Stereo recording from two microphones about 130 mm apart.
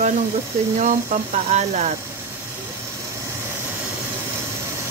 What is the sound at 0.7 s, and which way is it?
A woman's voice, 70° right (ahead or behind).